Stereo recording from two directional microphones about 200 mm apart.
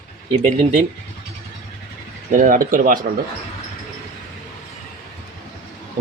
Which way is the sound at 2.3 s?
40° right (ahead or behind).